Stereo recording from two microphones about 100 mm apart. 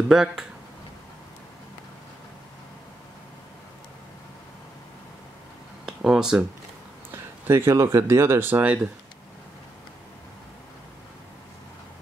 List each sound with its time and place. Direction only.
0.1 s speech: 5° right (ahead or behind)
5.9 s speech: 5° right (ahead or behind)
7.1 s speech: 25° right (ahead or behind)